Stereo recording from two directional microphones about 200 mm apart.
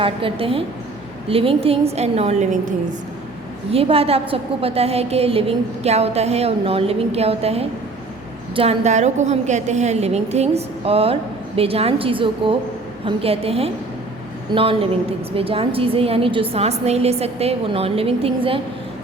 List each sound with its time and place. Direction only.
0.0 s a woman's voice: 25° right (ahead or behind)